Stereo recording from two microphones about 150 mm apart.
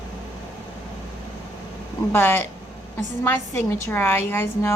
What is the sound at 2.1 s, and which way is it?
Speech, 15° left (ahead or behind).